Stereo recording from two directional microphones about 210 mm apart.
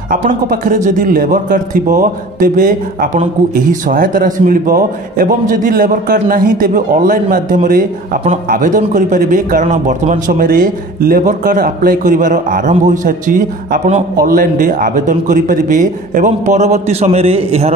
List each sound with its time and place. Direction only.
0.1 s a man's voice: 40° right (ahead or behind)